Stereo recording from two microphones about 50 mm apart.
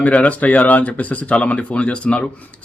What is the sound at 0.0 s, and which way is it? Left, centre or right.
Speech, left.